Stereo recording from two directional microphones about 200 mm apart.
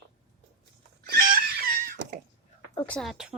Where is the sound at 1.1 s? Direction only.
50° right (ahead or behind).